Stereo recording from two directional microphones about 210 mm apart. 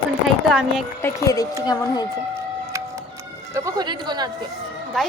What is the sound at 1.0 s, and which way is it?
Speech, 15° left (ahead or behind).